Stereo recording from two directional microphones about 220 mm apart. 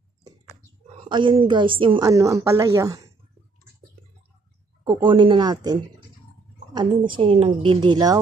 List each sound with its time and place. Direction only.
1.0 s a woman's voice: 20° right (ahead or behind)
4.9 s a woman's voice: 20° right (ahead or behind)